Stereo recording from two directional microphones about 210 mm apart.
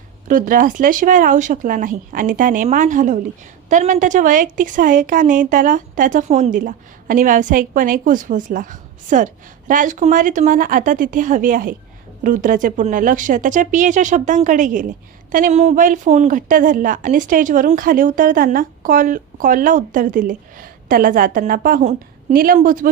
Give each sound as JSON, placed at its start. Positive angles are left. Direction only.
{"t": 0.3, "sound": "speech", "side_deg": -40}